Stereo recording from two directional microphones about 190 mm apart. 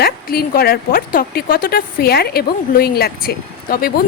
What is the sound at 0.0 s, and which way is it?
A woman's voice, 50° left (ahead or behind).